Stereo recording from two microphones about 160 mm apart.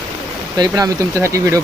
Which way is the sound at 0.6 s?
25° right (ahead or behind).